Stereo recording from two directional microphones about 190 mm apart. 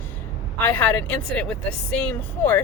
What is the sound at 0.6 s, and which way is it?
A woman's voice, 10° left (ahead or behind).